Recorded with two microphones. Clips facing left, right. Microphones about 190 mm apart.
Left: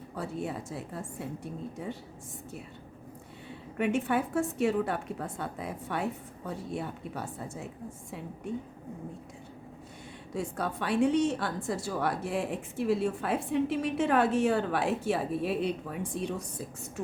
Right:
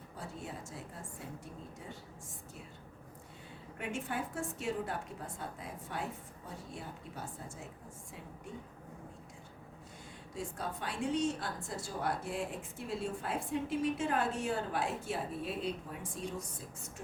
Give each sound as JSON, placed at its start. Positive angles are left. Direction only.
{"t": 0.2, "sound": "a woman's voice", "side_deg": 70}
{"t": 3.8, "sound": "a woman's voice", "side_deg": 70}
{"t": 10.3, "sound": "a woman's voice", "side_deg": 70}